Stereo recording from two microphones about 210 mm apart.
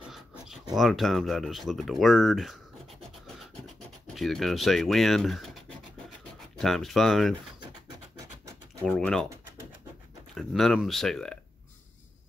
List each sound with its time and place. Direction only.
0.7 s speech: centre (ahead or behind)
3.3 s scratch: centre (ahead or behind)
6.6 s speech: centre (ahead or behind)
7.6 s scratch: 20° right (ahead or behind)
8.8 s speech: 5° left (ahead or behind)
10.3 s speech: centre (ahead or behind)